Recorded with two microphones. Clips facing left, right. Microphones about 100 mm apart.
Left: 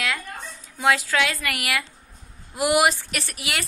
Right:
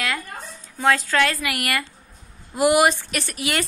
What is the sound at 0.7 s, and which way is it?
Speech, 5° left (ahead or behind).